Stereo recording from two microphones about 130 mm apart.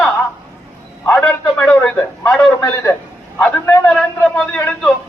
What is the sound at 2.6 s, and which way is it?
Speech, 20° left (ahead or behind).